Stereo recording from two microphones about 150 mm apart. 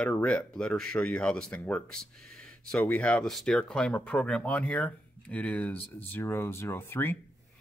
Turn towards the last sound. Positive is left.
turn(degrees=15)  # may be behind; listen again after turning